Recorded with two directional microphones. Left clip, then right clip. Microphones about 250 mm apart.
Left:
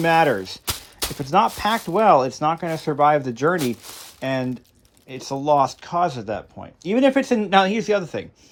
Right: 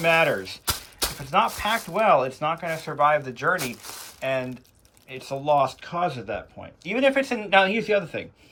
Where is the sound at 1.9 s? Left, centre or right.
Left.